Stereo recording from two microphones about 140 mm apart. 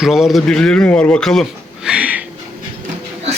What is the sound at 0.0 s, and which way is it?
A man's voice, centre (ahead or behind).